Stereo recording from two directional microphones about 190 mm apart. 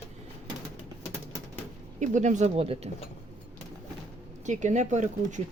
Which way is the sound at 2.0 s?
40° right (ahead or behind).